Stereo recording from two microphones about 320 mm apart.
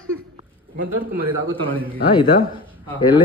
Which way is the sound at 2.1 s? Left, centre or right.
Centre.